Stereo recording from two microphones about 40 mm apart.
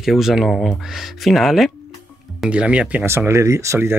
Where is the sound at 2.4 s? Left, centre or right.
Right.